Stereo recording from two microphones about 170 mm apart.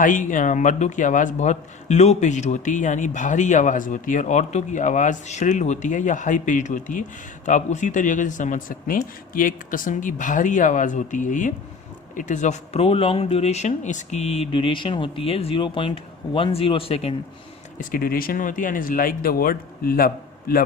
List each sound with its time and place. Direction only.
0.0 s a man's voice: 50° left (ahead or behind); by 17.2 s 35° left (ahead or behind)
17.7 s speech: 60° left (ahead or behind)